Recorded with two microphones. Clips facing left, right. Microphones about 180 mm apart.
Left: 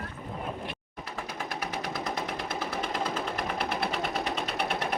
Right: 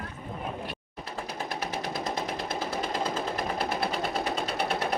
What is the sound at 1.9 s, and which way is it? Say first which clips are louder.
Sewing machine: right 1 dB; 35° right (ahead or behind).